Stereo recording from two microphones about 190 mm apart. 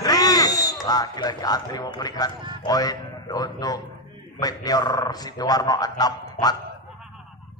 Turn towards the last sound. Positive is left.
turn(degrees=20)  # may be behind; listen again after turning